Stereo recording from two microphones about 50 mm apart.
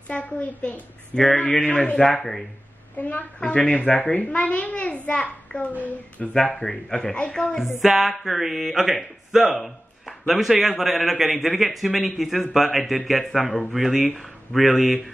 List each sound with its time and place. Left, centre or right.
0.1 s a child's voice: left
1.1 s speech: centre
1.4 s a child's voice: left
3.0 s a woman's voice: left
3.3 s a child's voice: left
7.8 s speech: centre
14.6 s speech: centre